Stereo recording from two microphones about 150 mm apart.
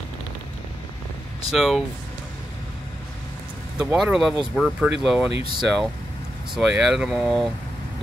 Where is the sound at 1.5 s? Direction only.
Centre (ahead or behind).